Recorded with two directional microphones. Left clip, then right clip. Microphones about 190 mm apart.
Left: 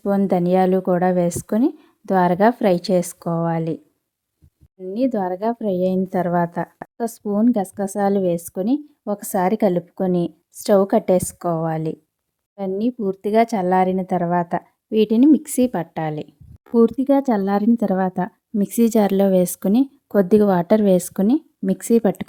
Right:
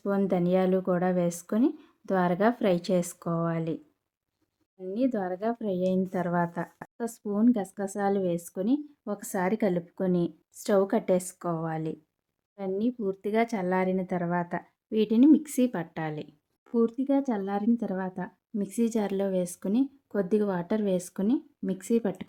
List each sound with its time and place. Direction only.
0.0 s a woman's voice: 40° left (ahead or behind)
4.8 s a woman's voice: 35° left (ahead or behind)
16.6 s speech: 50° left (ahead or behind)